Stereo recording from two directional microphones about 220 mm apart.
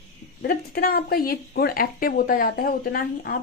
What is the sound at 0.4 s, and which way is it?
Speech, 40° left (ahead or behind).